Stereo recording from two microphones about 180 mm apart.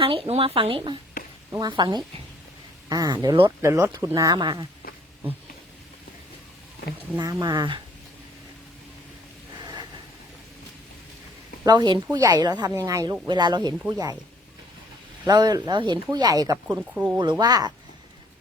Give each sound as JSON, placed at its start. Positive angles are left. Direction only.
{"t": 0.0, "sound": "speech", "side_deg": -30}
{"t": 7.2, "sound": "speech", "side_deg": -20}
{"t": 11.6, "sound": "speech", "side_deg": -25}
{"t": 15.3, "sound": "speech", "side_deg": -20}
{"t": 16.6, "sound": "speech", "side_deg": -5}
{"t": 17.2, "sound": "speech", "side_deg": -25}